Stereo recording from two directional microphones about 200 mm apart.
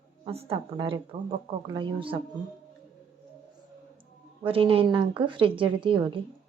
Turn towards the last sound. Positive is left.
turn(degrees=-25)  # may be behind; listen again after turning